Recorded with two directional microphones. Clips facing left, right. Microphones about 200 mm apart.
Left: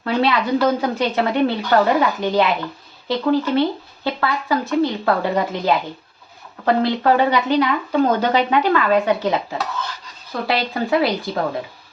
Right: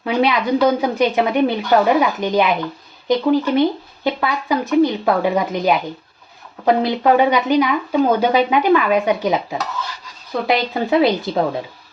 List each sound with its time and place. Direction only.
0.0 s speech: 15° right (ahead or behind)